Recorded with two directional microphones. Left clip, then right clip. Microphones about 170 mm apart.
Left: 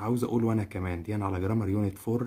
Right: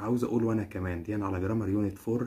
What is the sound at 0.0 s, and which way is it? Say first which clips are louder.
Speech: even; 40° left (ahead or behind).